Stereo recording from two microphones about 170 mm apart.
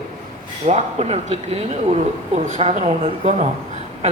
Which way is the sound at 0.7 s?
40° right (ahead or behind).